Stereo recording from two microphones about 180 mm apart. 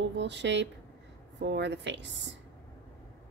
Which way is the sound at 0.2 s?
75° right (ahead or behind).